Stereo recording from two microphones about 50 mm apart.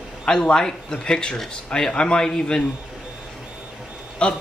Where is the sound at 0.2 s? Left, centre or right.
Centre.